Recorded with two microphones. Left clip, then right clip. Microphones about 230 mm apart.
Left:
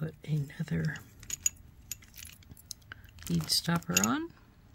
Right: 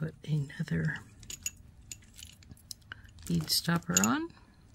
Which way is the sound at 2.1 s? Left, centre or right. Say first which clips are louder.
Left 1 dB; centre.